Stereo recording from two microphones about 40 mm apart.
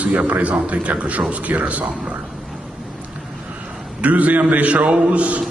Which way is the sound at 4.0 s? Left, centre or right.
Right.